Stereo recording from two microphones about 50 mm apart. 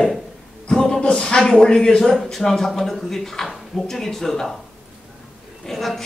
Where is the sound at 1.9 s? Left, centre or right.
Centre.